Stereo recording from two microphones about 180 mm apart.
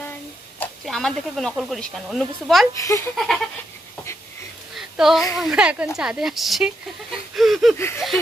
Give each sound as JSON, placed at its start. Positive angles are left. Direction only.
{"t": 0.6, "sound": "speech", "side_deg": 0}
{"t": 2.7, "sound": "speech", "side_deg": 15}
{"t": 3.2, "sound": "speech", "side_deg": 0}
{"t": 4.7, "sound": "a sound", "side_deg": 0}
{"t": 5.4, "sound": "speech", "side_deg": -5}